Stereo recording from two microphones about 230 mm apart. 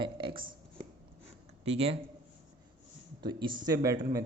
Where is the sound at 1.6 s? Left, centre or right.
Right.